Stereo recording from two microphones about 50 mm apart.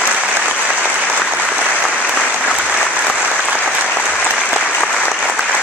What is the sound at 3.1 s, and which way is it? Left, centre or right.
Applause, right.